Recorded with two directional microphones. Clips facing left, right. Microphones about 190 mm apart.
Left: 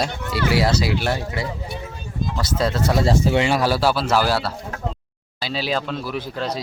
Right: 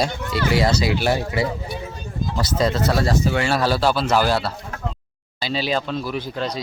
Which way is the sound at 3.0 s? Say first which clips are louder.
Left 2 dB; 25° left (ahead or behind).